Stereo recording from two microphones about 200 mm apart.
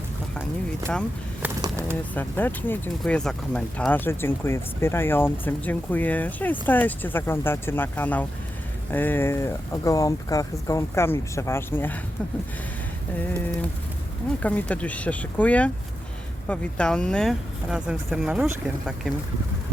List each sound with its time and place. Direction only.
1.6 s bird: 15° right (ahead or behind)
2.1 s speech: 10° left (ahead or behind)
14.4 s speech: 5° left (ahead or behind)